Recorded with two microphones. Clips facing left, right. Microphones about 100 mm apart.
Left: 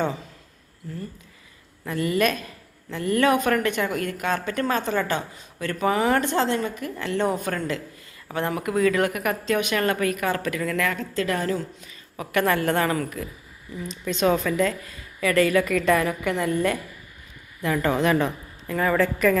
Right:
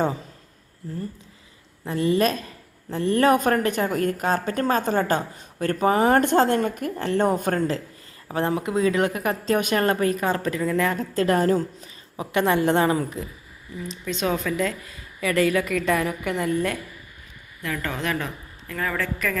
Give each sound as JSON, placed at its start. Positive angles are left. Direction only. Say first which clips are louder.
{"t": 1.8, "sound": "a woman's voice", "louder": "right 2 dB", "side_deg": -30}
{"t": 6.9, "sound": "a woman's voice", "louder": "right 2 dB", "side_deg": -40}
{"t": 8.3, "sound": "a woman's voice", "louder": "right 2 dB", "side_deg": -30}
{"t": 9.6, "sound": "a woman's voice", "louder": "right 2 dB", "side_deg": -40}
{"t": 10.9, "sound": "a woman's voice", "louder": "right 4 dB", "side_deg": -40}
{"t": 12.1, "sound": "a woman's voice", "louder": "right 1 dB", "side_deg": -20}
{"t": 14.0, "sound": "a woman's voice", "louder": "left 4 dB", "side_deg": 0}
{"t": 17.6, "sound": "a woman's voice", "louder": "left 6 dB", "side_deg": 20}